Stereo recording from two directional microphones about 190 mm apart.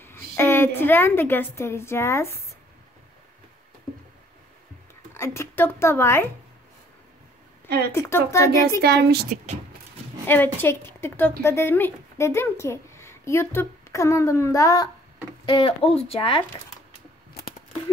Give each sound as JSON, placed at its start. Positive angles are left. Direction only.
{"t": 0.0, "sound": "a woman's voice", "side_deg": 10}
{"t": 5.1, "sound": "speech", "side_deg": 15}
{"t": 7.9, "sound": "speech", "side_deg": 15}
{"t": 8.8, "sound": "a woman's voice", "side_deg": -55}
{"t": 10.2, "sound": "a woman's voice", "side_deg": 10}